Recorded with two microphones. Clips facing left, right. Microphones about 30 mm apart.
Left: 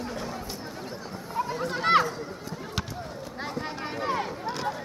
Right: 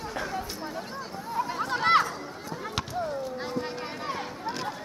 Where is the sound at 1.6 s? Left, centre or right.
Centre.